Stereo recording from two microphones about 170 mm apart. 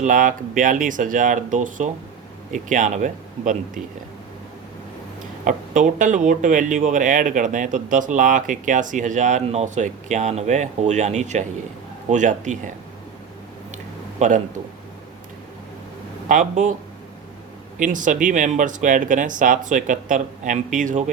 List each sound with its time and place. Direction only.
0.0 s speech: 50° right (ahead or behind)
5.5 s speech: 50° right (ahead or behind)
14.2 s a man's voice: 45° right (ahead or behind)
16.3 s speech: 45° right (ahead or behind)
17.7 s speech: 50° right (ahead or behind)